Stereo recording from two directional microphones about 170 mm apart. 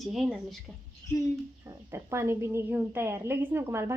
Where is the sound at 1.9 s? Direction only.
15° right (ahead or behind).